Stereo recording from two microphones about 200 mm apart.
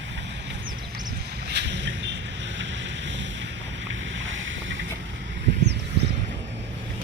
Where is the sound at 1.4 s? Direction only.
60° right (ahead or behind).